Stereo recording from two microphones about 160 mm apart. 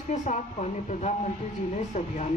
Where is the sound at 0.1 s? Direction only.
45° left (ahead or behind).